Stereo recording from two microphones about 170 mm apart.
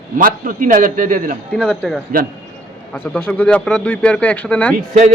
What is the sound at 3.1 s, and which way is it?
Speech, 5° left (ahead or behind).